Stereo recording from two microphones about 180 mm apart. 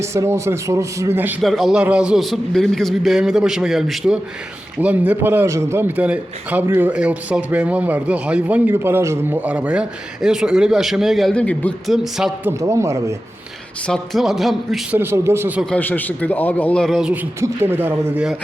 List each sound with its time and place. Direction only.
0.0 s a man's voice: 15° right (ahead or behind)
1.4 s a man's voice: centre (ahead or behind)
12.5 s a man's voice: 15° right (ahead or behind)
13.8 s a man's voice: centre (ahead or behind)
14.9 s a man's voice: 15° right (ahead or behind)
15.7 s a man's voice: 10° left (ahead or behind)
17.4 s a man's voice: 10° right (ahead or behind)